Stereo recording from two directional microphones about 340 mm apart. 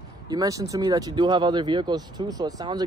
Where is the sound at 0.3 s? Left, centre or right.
Centre.